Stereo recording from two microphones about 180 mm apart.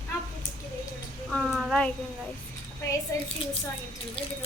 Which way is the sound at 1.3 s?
Centre (ahead or behind).